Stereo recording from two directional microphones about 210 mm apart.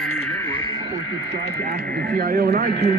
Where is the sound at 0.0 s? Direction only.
5° left (ahead or behind).